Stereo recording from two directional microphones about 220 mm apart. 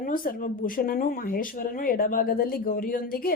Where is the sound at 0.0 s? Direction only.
40° left (ahead or behind).